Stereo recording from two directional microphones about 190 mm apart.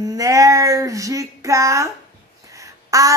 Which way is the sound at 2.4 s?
15° right (ahead or behind).